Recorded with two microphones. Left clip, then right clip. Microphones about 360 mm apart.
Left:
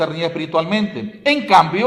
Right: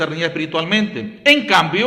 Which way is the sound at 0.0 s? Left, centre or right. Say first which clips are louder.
Even; centre.